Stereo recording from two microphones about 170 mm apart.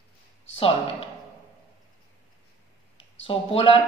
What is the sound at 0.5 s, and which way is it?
Speech, 35° left (ahead or behind).